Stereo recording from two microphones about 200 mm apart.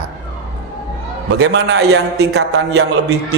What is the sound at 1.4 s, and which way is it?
A man's voice, 60° right (ahead or behind).